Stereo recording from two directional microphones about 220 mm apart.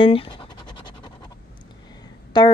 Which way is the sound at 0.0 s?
25° left (ahead or behind).